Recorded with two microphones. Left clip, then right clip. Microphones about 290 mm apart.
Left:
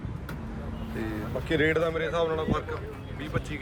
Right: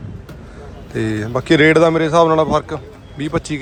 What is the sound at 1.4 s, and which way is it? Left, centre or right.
Speech, centre.